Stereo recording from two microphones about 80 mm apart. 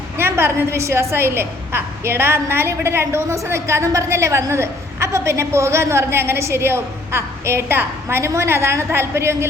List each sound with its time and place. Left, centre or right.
0.2 s a woman's voice: right